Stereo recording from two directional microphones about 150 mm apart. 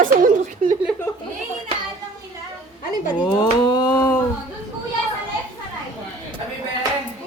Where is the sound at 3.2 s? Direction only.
25° left (ahead or behind).